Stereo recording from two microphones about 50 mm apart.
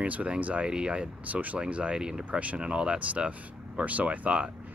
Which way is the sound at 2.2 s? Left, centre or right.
Right.